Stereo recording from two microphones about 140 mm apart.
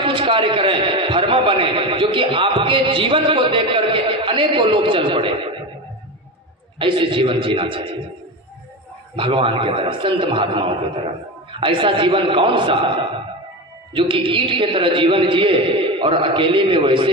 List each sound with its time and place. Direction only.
0.0 s a man's voice: 35° right (ahead or behind)
6.7 s a man's voice: 35° right (ahead or behind)
9.1 s a man's voice: 40° right (ahead or behind)
13.9 s a man's voice: 35° right (ahead or behind)